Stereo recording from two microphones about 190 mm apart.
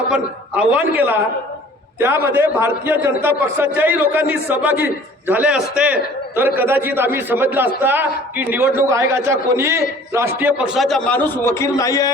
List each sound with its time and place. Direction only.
0.1 s a man's voice: 5° right (ahead or behind); by 12.1 s 20° left (ahead or behind)